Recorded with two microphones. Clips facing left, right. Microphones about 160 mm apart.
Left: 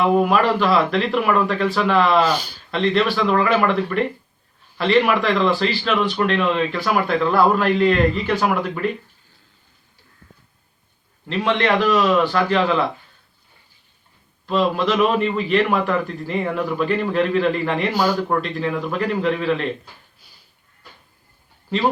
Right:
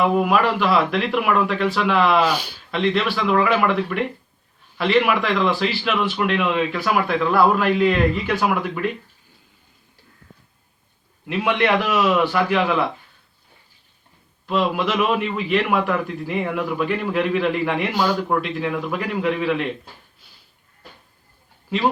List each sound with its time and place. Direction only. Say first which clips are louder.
0.0 s a man's voice: left 1 dB; centre (ahead or behind)
11.3 s a man's voice: even; 10° right (ahead or behind)
14.4 s a man's voice: left 2 dB; 5° right (ahead or behind)
17.9 s a man's voice: left 1 dB; 5° left (ahead or behind)
20.1 s a sound: even; centre (ahead or behind)